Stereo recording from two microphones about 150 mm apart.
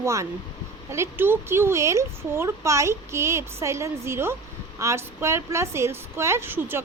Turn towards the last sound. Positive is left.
turn(degrees=-15)  # may be behind; listen again after turning